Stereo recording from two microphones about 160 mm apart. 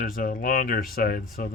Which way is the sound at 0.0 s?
65° left (ahead or behind).